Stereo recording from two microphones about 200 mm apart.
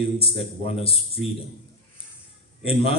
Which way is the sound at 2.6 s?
30° left (ahead or behind).